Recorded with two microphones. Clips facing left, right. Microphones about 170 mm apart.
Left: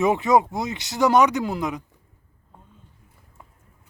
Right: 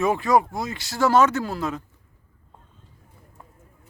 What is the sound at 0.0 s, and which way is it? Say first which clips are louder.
Speech: left 1 dB; 20° left (ahead or behind).